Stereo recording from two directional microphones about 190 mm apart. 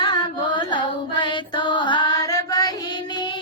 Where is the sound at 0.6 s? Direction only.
25° left (ahead or behind).